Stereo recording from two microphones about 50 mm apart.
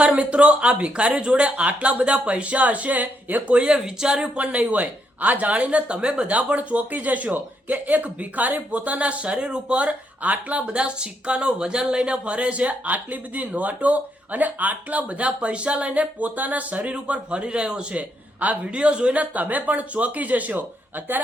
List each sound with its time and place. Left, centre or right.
0.2 s speech: right
4.4 s speech: right